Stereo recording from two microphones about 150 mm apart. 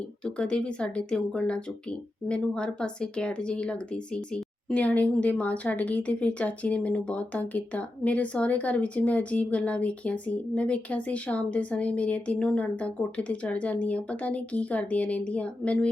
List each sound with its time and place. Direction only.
0.3 s speech: 5° left (ahead or behind)